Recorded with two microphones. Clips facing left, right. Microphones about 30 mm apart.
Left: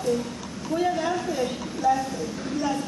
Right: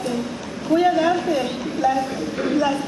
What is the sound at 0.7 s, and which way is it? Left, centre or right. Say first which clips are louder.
A woman's voice: right 7 dB; right.